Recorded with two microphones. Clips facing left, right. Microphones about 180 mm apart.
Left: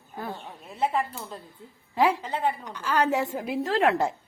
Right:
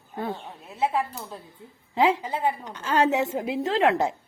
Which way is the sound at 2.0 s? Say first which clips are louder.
Right 1 dB; 20° right (ahead or behind).